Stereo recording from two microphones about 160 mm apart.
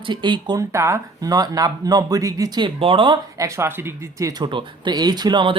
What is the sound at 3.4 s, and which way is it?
Speech, 15° right (ahead or behind).